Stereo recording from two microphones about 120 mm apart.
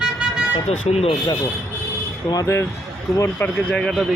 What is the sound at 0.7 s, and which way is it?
Speech, 65° left (ahead or behind).